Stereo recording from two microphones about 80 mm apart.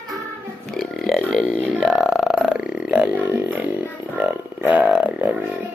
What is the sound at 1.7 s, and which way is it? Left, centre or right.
Burping, centre.